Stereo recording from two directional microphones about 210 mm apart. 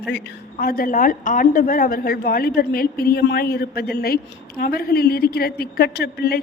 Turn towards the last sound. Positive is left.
turn(degrees=50)  # may be behind; listen again after turning